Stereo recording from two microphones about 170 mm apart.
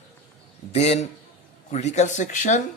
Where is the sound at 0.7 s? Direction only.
40° left (ahead or behind).